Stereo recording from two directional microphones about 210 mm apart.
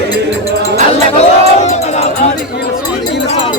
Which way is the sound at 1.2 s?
30° left (ahead or behind).